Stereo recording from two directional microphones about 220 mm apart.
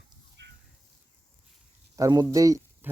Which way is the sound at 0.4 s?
55° right (ahead or behind).